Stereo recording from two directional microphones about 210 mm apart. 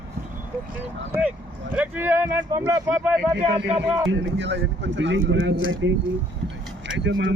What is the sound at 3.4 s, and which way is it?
Speech, 30° right (ahead or behind).